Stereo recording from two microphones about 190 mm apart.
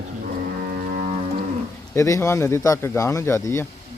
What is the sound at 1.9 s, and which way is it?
Speech, 15° left (ahead or behind).